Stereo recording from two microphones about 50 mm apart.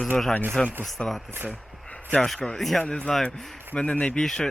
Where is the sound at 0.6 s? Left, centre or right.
Centre.